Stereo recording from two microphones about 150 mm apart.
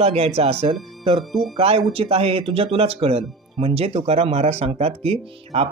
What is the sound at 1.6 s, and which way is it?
Speech, 40° right (ahead or behind).